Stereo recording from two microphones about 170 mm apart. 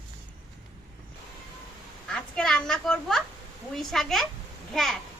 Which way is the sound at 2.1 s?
5° left (ahead or behind).